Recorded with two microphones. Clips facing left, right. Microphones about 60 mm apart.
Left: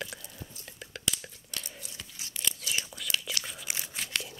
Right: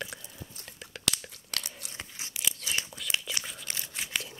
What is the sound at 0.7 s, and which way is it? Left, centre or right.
Whispering, centre.